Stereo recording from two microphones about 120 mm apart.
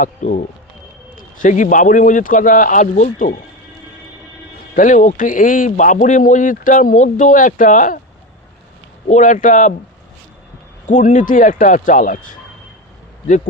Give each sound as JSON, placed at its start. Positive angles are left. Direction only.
{"t": 0.0, "sound": "speech", "side_deg": 80}
{"t": 4.8, "sound": "speech", "side_deg": 90}
{"t": 9.0, "sound": "speech", "side_deg": 85}
{"t": 10.8, "sound": "speech", "side_deg": 90}